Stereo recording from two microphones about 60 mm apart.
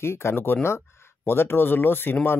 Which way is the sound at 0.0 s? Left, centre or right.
Left.